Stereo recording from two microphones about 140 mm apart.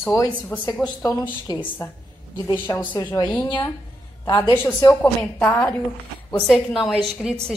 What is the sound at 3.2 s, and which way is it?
A woman's voice, 35° left (ahead or behind).